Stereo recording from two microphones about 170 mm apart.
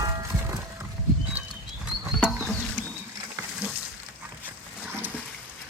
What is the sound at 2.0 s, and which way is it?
Rodents, 5° right (ahead or behind).